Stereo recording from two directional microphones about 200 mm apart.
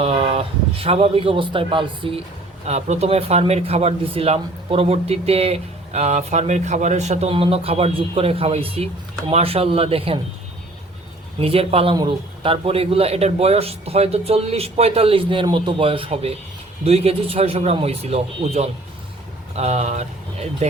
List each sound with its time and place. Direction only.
0.0 s a man's voice: 30° right (ahead or behind)
11.3 s a man's voice: 30° right (ahead or behind)